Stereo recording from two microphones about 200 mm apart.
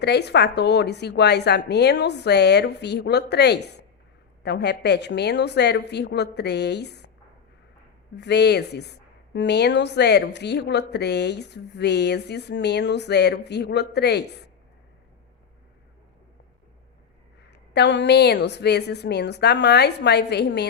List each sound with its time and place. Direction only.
0.0 s a woman's voice: 55° left (ahead or behind)
8.1 s a woman's voice: 60° left (ahead or behind)
17.5 s a woman's voice: 60° left (ahead or behind)